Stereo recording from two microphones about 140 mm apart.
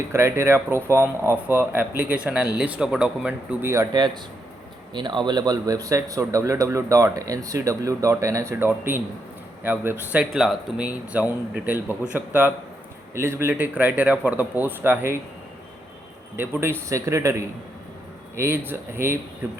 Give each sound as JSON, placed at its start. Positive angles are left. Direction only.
{"t": 0.1, "sound": "speech", "side_deg": -20}
{"t": 3.9, "sound": "speech", "side_deg": -30}
{"t": 16.4, "sound": "speech", "side_deg": -15}